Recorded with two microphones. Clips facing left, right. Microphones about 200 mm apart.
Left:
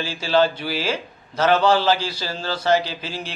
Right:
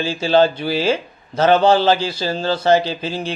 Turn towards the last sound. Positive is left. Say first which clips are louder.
# right 7 dB
turn(degrees=-25)  # may be behind; listen again after turning